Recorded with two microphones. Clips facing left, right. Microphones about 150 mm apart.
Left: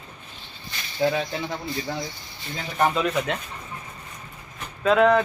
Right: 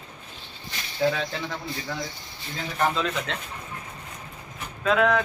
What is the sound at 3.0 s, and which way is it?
Speech, 15° left (ahead or behind).